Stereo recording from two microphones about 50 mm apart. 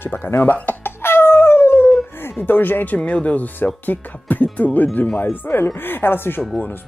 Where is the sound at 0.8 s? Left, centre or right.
Left.